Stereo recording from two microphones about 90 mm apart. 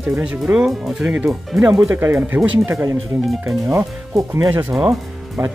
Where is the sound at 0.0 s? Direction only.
15° right (ahead or behind).